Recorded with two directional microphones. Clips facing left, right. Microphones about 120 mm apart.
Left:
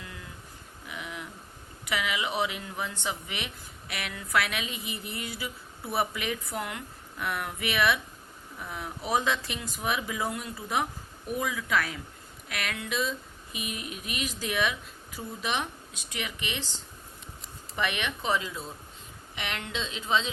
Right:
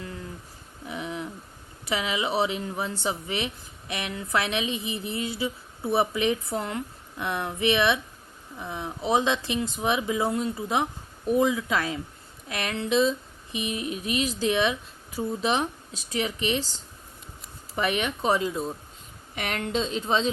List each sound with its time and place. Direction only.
0.0 s a sound: 35° right (ahead or behind)
1.8 s speech: 30° right (ahead or behind)
17.7 s speech: 35° right (ahead or behind)